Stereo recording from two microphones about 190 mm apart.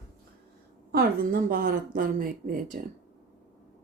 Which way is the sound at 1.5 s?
45° right (ahead or behind).